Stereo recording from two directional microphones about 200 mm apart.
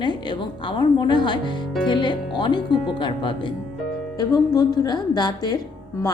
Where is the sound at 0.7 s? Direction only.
20° left (ahead or behind).